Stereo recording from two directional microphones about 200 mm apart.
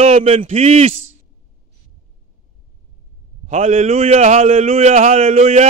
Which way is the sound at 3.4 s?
35° right (ahead or behind).